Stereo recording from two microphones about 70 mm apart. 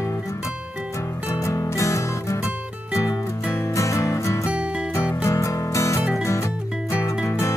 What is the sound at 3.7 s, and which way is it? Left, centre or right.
Music, left.